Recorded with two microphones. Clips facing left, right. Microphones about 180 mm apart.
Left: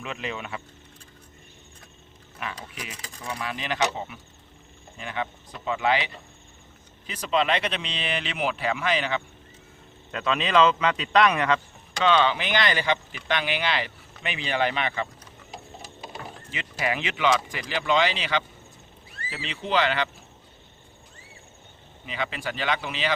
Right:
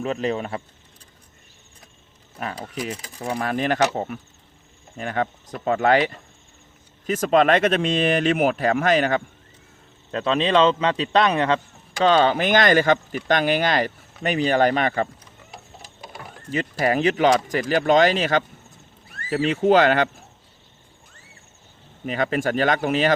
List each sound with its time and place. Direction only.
0.0 s speech: 40° right (ahead or behind)
2.4 s speech: 40° right (ahead or behind)
10.1 s speech: 35° right (ahead or behind)
11.9 s speech: 45° right (ahead or behind)
16.5 s speech: 40° right (ahead or behind)
22.0 s speech: 45° right (ahead or behind)